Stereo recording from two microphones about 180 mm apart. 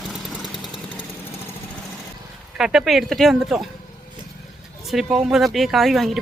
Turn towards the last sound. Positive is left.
turn(degrees=0)  # may be behind; listen again after turning